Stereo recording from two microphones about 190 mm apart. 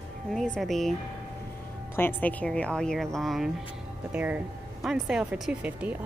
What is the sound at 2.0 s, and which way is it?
A woman's voice, 10° left (ahead or behind).